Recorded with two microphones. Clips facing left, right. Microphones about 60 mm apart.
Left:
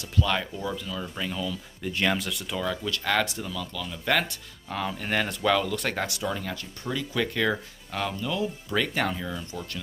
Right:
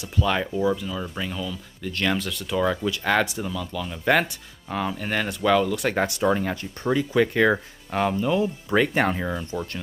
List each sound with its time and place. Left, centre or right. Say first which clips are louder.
0.2 s speech: right 5 dB; centre
1.8 s speech: right 1 dB; centre
2.6 s speech: right 6 dB; right
4.6 s speech: right 3 dB; centre
5.9 s speech: right 8 dB; right